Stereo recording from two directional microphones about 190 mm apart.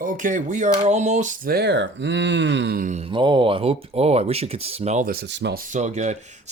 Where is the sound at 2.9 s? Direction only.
30° right (ahead or behind).